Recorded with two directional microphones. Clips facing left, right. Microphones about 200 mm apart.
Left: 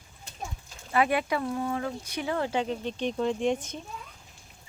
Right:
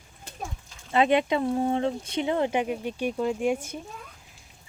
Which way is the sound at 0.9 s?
20° right (ahead or behind).